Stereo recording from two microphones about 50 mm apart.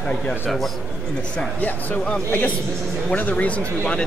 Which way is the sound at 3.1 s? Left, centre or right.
Left.